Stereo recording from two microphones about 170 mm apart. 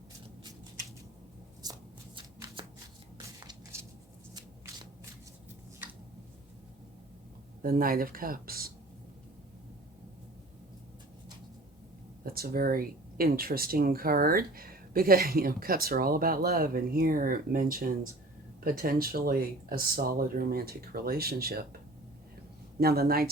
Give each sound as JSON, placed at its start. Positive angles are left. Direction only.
{"t": 1.6, "sound": "shuffling cards", "side_deg": -20}
{"t": 3.4, "sound": "a sound", "side_deg": -15}
{"t": 7.6, "sound": "speech", "side_deg": -60}
{"t": 12.2, "sound": "speech", "side_deg": -60}
{"t": 22.8, "sound": "speech", "side_deg": -65}